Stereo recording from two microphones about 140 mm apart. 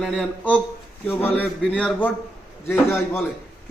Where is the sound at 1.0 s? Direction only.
15° left (ahead or behind).